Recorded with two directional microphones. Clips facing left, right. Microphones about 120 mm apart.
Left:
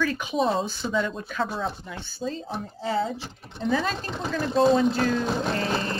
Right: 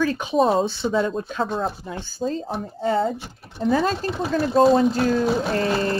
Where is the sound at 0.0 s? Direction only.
35° right (ahead or behind).